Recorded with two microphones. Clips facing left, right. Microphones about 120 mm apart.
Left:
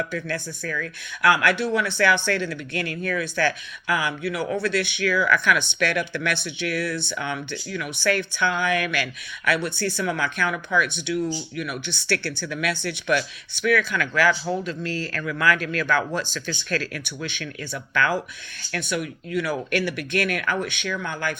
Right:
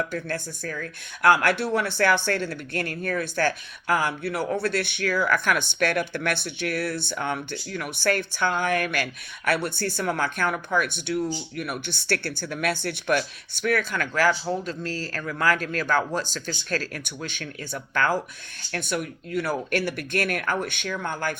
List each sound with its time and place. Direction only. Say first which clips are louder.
0.7 s speech: left 4 dB; 45° right (ahead or behind)